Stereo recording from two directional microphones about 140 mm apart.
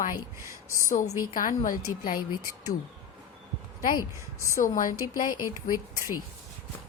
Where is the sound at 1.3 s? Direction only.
75° left (ahead or behind).